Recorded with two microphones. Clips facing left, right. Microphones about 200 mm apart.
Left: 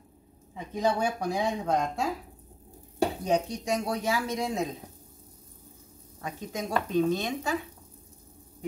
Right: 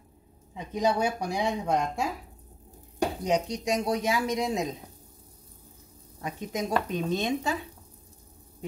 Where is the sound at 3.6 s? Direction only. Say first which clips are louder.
Right 2 dB; 15° right (ahead or behind).